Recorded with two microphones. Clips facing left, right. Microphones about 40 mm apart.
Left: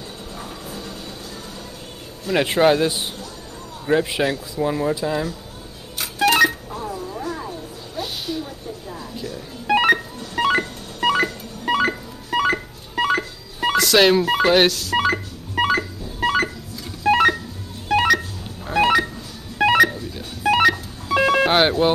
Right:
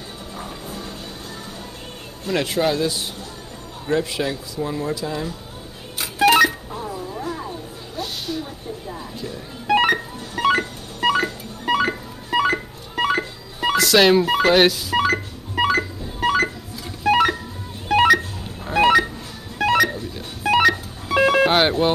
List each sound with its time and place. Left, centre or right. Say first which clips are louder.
0.4 s music: right 2 dB; right
2.4 s speech: left 5 dB; left
5.9 s telephone dialing: right 2 dB; centre
8.4 s a sound: even; centre
9.7 s telephone dialing: left 1 dB; centre
10.4 s music: right 1 dB; centre
11.7 s telephone dialing: even; centre
15.0 s telephone dialing: left 1 dB; centre
17.0 s telephone dialing: left 1 dB; centre
18.7 s a sound: right 2 dB; centre
19.6 s telephone dialing: left 3 dB; centre
19.9 s music: right 1 dB; centre